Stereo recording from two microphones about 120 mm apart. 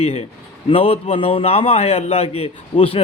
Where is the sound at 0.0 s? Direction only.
60° left (ahead or behind).